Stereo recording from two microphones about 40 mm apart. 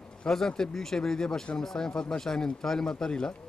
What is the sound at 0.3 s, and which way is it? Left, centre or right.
Speech, centre.